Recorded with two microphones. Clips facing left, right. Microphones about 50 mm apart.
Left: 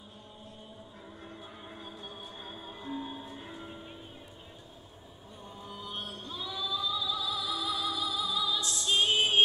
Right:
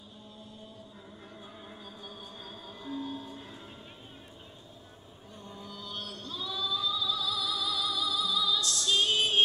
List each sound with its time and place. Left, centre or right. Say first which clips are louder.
1.8 s music: left 1 dB; left
5.5 s music: left 1 dB; left